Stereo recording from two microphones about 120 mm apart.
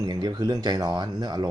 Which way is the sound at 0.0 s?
35° right (ahead or behind).